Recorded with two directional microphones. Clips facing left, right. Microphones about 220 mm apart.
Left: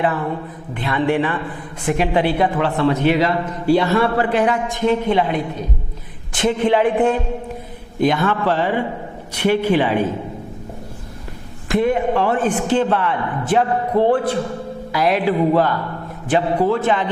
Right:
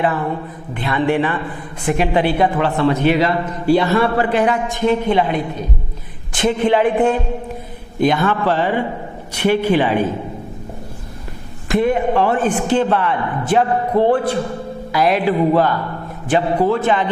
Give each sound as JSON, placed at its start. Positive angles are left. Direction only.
{"t": 0.0, "sound": "a man's voice", "side_deg": -20}
{"t": 11.7, "sound": "a man's voice", "side_deg": -15}